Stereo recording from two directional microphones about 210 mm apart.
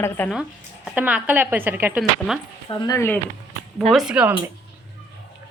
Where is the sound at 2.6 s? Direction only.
15° left (ahead or behind).